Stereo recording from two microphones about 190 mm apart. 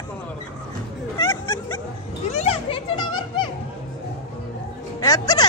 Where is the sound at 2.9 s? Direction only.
25° left (ahead or behind).